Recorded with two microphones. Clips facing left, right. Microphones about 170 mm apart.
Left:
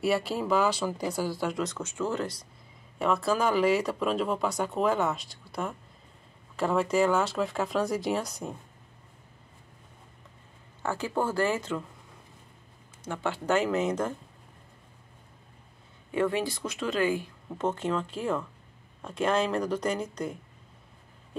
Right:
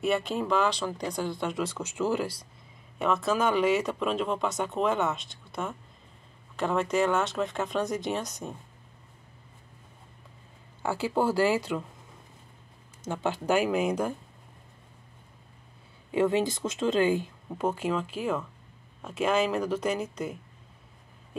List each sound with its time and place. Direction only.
0.0 s speech: 5° left (ahead or behind)
3.0 s speech: centre (ahead or behind)
10.8 s speech: 10° right (ahead or behind)
13.1 s speech: 15° right (ahead or behind)
16.1 s speech: 20° right (ahead or behind)
17.5 s speech: 10° right (ahead or behind)